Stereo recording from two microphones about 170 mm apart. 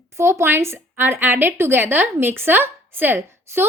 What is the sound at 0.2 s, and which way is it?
A woman's voice, 15° right (ahead or behind).